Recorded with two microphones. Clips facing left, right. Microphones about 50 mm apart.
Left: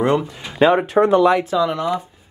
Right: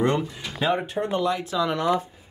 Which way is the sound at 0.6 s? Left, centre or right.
Left.